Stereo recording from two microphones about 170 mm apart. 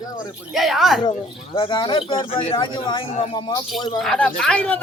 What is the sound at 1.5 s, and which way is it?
Speech, 30° left (ahead or behind).